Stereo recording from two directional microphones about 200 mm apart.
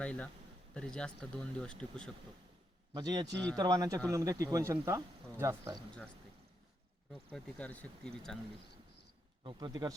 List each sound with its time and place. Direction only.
0.0 s speech: 5° left (ahead or behind)
2.9 s speech: 20° right (ahead or behind)
7.1 s speech: 5° left (ahead or behind)
9.4 s speech: 20° right (ahead or behind)